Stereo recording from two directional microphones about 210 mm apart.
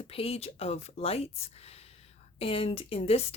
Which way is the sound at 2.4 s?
25° left (ahead or behind).